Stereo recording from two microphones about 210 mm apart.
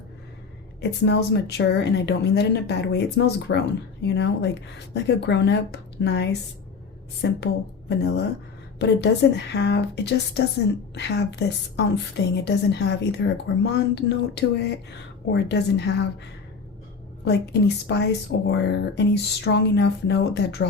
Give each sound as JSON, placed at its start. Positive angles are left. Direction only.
{"t": 0.8, "sound": "a woman's voice", "side_deg": 55}
{"t": 17.2, "sound": "a woman's voice", "side_deg": 55}